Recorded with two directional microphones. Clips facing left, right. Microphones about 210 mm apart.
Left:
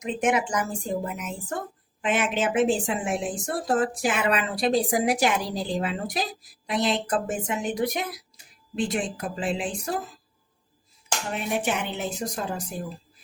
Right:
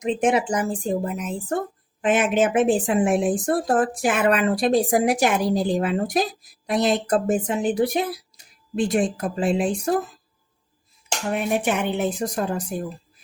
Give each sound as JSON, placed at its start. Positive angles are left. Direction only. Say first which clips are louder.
{"t": 0.0, "sound": "speech", "louder": "right 4 dB", "side_deg": -30}
{"t": 2.0, "sound": "a woman's voice", "louder": "right 6 dB", "side_deg": -45}
{"t": 8.7, "sound": "a woman's voice", "louder": "right 6 dB", "side_deg": -45}
{"t": 11.3, "sound": "a woman's voice", "louder": "right 5 dB", "side_deg": -55}